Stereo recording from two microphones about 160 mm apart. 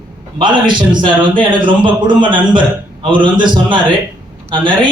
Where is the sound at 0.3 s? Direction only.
30° right (ahead or behind).